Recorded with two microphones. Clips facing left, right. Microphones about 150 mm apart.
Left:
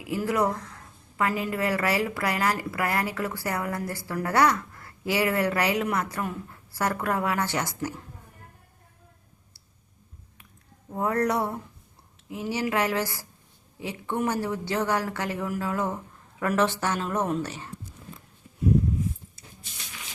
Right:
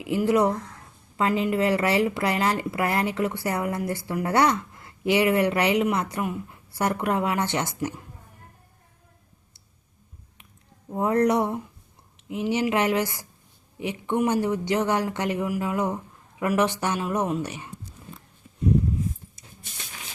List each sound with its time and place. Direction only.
0.0 s speech: 25° right (ahead or behind)
10.9 s a woman's voice: 20° right (ahead or behind)
19.4 s a sound: 20° right (ahead or behind)